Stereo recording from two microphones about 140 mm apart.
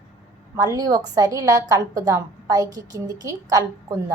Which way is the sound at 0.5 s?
25° right (ahead or behind).